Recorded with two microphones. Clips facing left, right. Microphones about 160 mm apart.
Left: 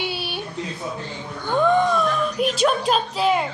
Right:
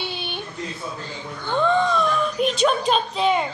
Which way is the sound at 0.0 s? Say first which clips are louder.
Left 2 dB; 5° left (ahead or behind).